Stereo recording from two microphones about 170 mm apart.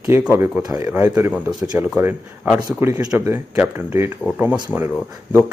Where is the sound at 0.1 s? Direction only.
15° right (ahead or behind).